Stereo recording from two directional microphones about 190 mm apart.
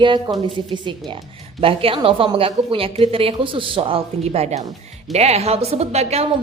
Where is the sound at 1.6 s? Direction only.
30° right (ahead or behind).